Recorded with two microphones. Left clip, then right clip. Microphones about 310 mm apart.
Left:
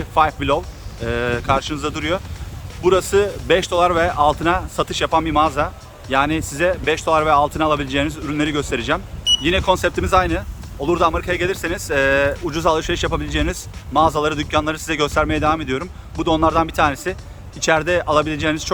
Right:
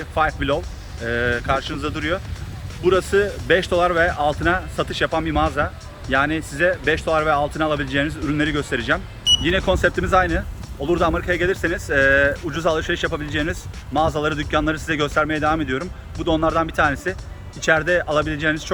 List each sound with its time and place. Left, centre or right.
0.1 s speech: centre